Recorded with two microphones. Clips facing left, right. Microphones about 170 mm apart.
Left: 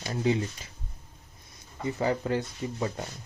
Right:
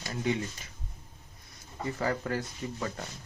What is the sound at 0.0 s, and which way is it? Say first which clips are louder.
Speech: left 4 dB; 30° left (ahead or behind).